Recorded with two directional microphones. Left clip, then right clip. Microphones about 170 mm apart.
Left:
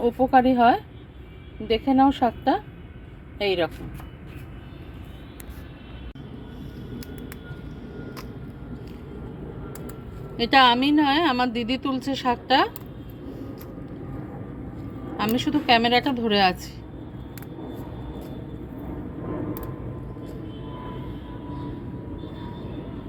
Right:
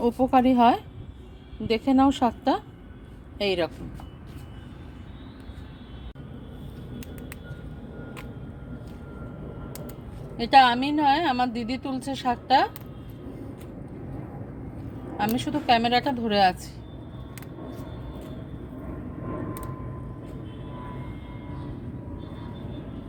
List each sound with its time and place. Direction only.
0.0 s a woman's voice: 5° right (ahead or behind)
10.3 s a woman's voice: 5° right (ahead or behind)
15.2 s a woman's voice: 10° right (ahead or behind)